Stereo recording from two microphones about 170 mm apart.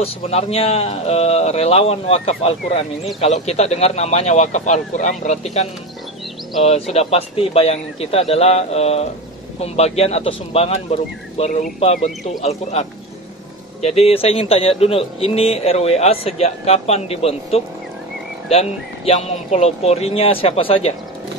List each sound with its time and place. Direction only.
0.0 s a man's voice: 35° left (ahead or behind)